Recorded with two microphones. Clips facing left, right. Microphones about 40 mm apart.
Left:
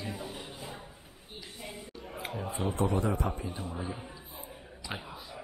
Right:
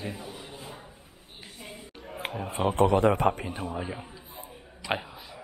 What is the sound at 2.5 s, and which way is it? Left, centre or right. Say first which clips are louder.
A man's voice: right 8 dB; right.